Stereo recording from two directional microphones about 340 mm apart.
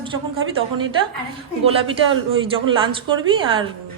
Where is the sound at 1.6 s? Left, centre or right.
Centre.